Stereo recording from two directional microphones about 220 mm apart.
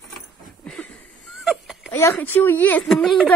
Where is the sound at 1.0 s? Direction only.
Centre (ahead or behind).